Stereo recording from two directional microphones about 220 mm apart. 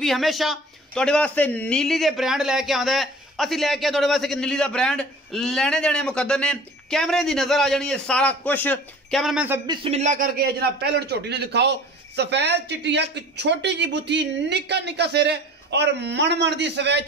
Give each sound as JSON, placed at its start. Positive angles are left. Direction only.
{"t": 0.0, "sound": "a man's voice", "side_deg": 0}
{"t": 9.7, "sound": "speech", "side_deg": -30}